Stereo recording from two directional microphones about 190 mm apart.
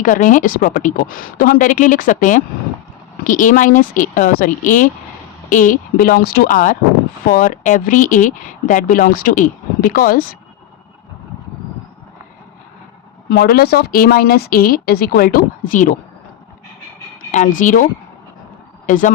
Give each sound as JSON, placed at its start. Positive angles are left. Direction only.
{"t": 0.0, "sound": "speech", "side_deg": 45}
{"t": 13.3, "sound": "speech", "side_deg": 55}
{"t": 17.6, "sound": "speech", "side_deg": 45}
{"t": 18.9, "sound": "speech", "side_deg": 45}